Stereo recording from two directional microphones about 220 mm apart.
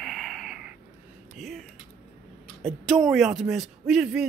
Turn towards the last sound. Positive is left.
turn(degrees=-5)  # may be behind; listen again after turning